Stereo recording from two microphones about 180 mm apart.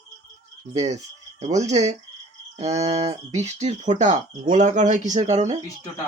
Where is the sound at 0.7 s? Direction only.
35° right (ahead or behind).